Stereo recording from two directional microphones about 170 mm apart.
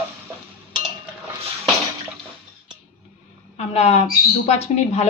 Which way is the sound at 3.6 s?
40° left (ahead or behind).